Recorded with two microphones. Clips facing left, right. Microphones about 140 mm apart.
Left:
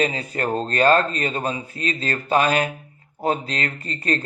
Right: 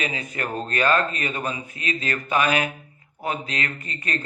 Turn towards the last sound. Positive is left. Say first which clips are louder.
# left 6 dB
turn(degrees=35)  # may be behind; listen again after turning